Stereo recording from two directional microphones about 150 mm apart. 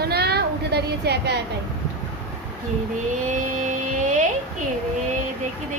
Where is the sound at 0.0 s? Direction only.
90° right.